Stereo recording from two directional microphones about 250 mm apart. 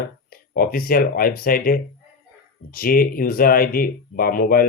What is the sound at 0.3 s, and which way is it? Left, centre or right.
Speech, left.